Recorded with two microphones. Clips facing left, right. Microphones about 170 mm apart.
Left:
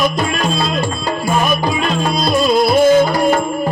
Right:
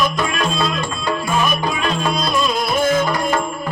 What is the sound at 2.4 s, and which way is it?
Music, 35° left (ahead or behind).